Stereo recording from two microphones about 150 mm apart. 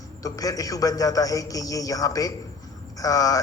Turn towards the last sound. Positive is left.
turn(degrees=25)  # may be behind; listen again after turning